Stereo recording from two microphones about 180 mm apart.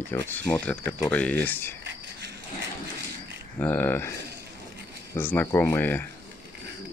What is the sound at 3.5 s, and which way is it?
Speech, 10° left (ahead or behind).